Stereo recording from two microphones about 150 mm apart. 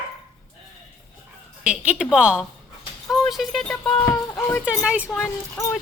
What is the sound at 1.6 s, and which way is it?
A woman's voice, 10° right (ahead or behind).